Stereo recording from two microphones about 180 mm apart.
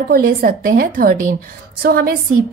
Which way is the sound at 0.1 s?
55° right (ahead or behind).